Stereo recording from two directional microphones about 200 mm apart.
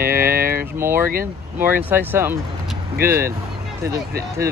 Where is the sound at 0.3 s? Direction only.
45° right (ahead or behind).